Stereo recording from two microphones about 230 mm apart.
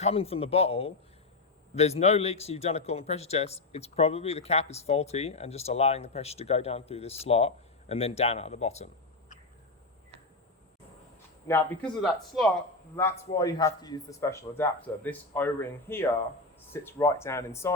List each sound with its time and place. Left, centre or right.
0.0 s a man's voice: left
11.4 s a man's voice: centre